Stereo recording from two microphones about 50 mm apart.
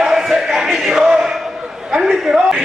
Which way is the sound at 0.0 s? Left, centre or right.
Centre.